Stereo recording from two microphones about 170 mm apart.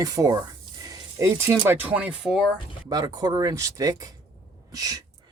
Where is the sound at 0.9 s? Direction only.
15° right (ahead or behind).